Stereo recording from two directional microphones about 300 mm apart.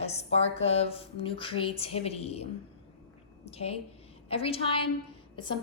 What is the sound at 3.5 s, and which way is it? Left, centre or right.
A woman's voice, centre.